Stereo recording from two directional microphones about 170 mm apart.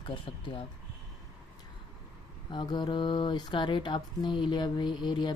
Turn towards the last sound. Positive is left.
turn(degrees=25)  # may be behind; listen again after turning